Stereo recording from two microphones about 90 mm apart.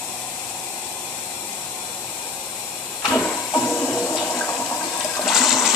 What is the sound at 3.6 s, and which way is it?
Toilet flush, 20° left (ahead or behind).